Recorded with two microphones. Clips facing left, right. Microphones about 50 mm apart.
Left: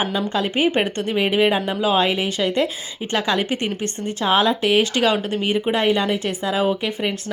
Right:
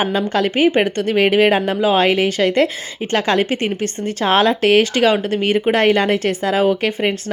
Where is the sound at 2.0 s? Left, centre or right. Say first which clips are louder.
Right 5 dB; right.